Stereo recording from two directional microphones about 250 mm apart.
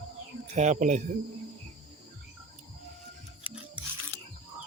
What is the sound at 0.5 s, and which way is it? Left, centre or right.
Speech, right.